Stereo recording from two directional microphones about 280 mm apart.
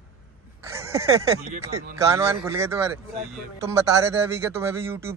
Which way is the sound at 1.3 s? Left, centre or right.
Right.